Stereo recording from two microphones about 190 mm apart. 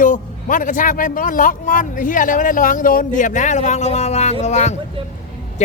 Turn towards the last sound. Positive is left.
turn(degrees=35)  # may be behind; listen again after turning